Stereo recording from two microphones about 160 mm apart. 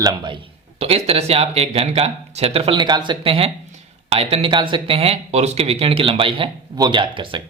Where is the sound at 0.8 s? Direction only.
40° right (ahead or behind).